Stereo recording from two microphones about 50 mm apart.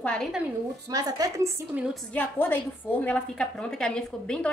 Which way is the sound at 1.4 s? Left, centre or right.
Right.